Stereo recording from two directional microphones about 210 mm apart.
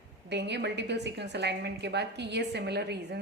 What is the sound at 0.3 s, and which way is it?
A woman's voice, 55° right (ahead or behind).